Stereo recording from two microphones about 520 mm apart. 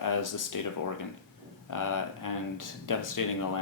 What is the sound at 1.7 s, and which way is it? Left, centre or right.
Speech, left.